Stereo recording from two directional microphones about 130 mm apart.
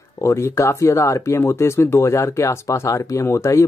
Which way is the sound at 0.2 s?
20° left (ahead or behind).